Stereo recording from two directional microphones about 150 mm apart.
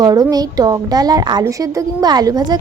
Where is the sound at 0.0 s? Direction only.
25° right (ahead or behind).